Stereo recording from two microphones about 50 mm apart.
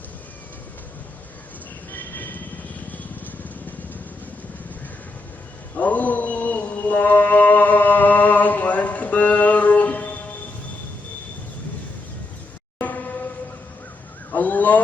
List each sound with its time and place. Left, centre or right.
1.9 s train: left
5.7 s mantra: left
12.8 s music: left
14.3 s a sound: left